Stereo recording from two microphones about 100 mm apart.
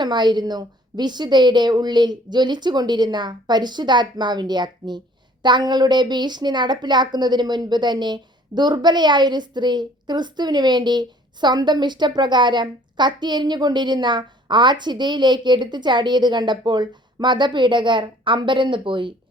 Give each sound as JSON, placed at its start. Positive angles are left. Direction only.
{"t": 0.0, "sound": "a woman's voice", "side_deg": -45}